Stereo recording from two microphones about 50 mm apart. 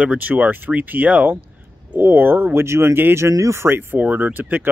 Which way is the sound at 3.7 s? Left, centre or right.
Right.